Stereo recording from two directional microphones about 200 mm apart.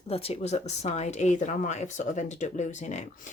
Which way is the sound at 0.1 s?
30° left (ahead or behind).